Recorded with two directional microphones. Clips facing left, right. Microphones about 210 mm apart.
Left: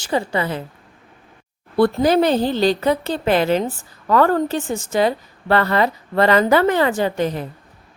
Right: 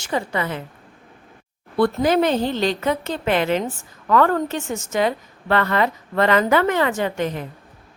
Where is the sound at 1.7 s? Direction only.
35° left (ahead or behind).